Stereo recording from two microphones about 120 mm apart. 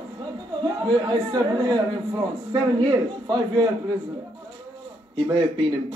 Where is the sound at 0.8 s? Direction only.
35° right (ahead or behind).